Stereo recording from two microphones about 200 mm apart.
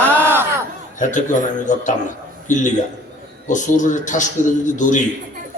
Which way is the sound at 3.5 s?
40° left (ahead or behind).